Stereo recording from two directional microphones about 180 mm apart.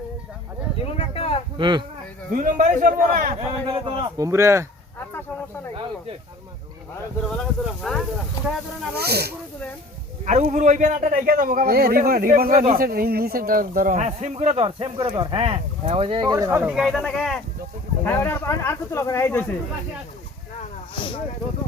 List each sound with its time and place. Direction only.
0.9 s a sound: 35° left (ahead or behind)
1.5 s speech: 25° right (ahead or behind)
2.3 s a man's voice: 45° right (ahead or behind)
3.3 s a man's voice: 30° right (ahead or behind)
4.2 s speech: 15° right (ahead or behind)
7.3 s speech: 5° left (ahead or behind)
9.0 s speech: 60° right (ahead or behind)
10.2 s a man's voice: 40° right (ahead or behind); by 16.8 s 10° right (ahead or behind)
16.8 s speech: centre (ahead or behind)
18.0 s speech: 15° left (ahead or behind)
20.9 s a sound: 30° left (ahead or behind)